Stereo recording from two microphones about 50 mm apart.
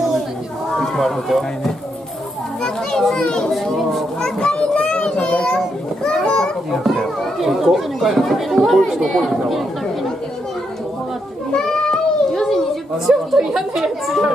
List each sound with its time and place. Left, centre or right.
0.7 s speech: centre
2.6 s children playing: centre
3.3 s a child's voice: centre
3.5 s speech: centre
4.2 s a child's voice: centre
5.3 s a sound: centre
6.0 s children playing: centre
6.7 s speech: centre
11.5 s a sound: centre
13.1 s a woman's voice: centre
13.6 s speech: centre